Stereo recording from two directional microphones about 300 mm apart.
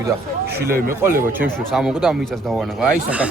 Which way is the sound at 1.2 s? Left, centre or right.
Centre.